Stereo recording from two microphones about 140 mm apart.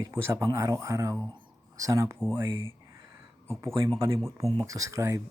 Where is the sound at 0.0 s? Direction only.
20° right (ahead or behind).